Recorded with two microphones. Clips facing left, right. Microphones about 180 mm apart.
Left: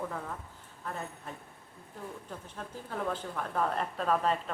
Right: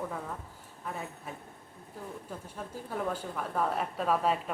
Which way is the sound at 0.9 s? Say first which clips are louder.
Even; 5° right (ahead or behind).